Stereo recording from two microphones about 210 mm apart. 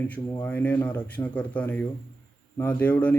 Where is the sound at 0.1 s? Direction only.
10° left (ahead or behind).